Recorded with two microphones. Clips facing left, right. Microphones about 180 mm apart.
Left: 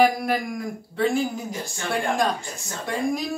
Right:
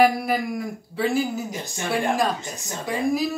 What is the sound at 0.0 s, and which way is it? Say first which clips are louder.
Speech: right 1 dB; centre (ahead or behind).